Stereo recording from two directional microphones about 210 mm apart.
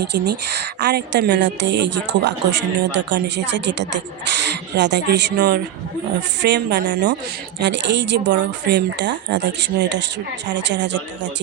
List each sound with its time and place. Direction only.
0.0 s a woman's voice: 55° right (ahead or behind)